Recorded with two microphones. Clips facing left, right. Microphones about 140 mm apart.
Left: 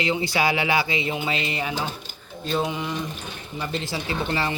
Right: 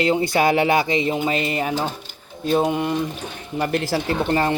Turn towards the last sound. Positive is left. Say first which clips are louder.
# right 6 dB
turn(degrees=-50)  # may be behind; listen again after turning